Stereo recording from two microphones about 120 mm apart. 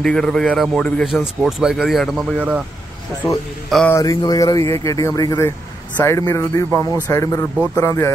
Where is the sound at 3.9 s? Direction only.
30° left (ahead or behind).